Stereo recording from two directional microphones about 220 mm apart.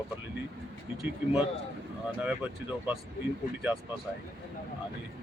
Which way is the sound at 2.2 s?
5° right (ahead or behind).